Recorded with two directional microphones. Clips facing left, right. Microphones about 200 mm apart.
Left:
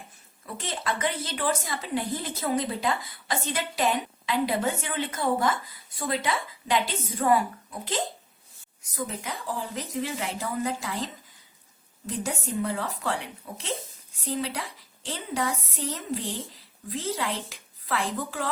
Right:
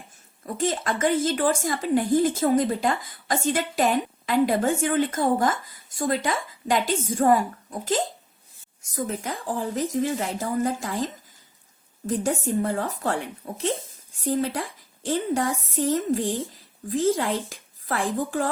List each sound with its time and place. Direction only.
0.4 s a woman's voice: 45° right (ahead or behind)
9.2 s a woman's voice: 45° right (ahead or behind)